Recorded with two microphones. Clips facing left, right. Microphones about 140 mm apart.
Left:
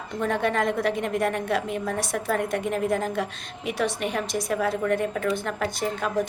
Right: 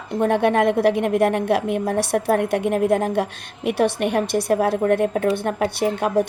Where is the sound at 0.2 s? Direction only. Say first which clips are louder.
Right 7 dB; 60° right (ahead or behind).